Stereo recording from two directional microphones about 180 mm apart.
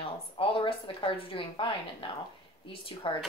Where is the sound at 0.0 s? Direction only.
30° left (ahead or behind).